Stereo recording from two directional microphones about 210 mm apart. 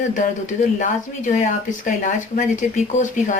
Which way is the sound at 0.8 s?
35° left (ahead or behind).